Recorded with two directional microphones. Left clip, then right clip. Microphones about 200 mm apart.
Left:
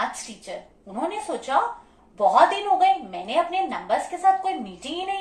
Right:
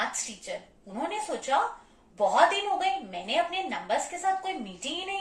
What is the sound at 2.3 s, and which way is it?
A woman's voice, centre (ahead or behind).